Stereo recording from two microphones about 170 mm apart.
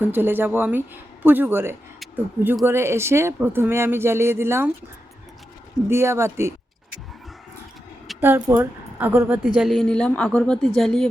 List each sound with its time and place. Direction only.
0.0 s speech: 10° right (ahead or behind)
5.9 s speech: 15° right (ahead or behind)
8.2 s speech: 10° right (ahead or behind)
9.6 s a woman's voice: centre (ahead or behind)